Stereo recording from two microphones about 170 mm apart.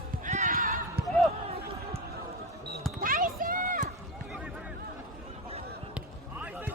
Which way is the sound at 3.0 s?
55° right (ahead or behind).